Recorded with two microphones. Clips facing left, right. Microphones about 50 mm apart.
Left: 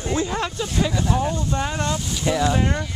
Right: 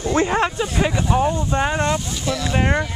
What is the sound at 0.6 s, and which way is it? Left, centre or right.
Speech, centre.